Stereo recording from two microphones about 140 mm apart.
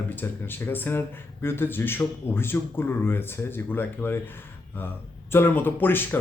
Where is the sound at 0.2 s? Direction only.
15° left (ahead or behind).